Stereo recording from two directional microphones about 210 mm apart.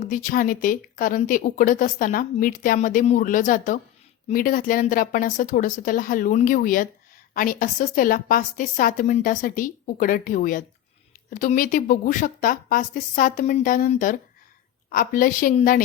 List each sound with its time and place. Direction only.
0.0 s speech: 40° left (ahead or behind)